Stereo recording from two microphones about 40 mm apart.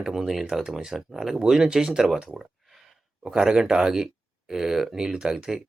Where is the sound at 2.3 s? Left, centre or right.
Centre.